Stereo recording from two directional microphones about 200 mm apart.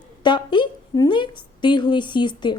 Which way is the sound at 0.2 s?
25° left (ahead or behind).